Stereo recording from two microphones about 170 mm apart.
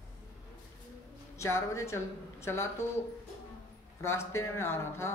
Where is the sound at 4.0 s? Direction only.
15° left (ahead or behind).